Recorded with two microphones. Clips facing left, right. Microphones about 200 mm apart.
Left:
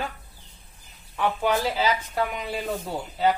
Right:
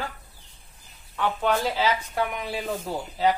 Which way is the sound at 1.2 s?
5° left (ahead or behind).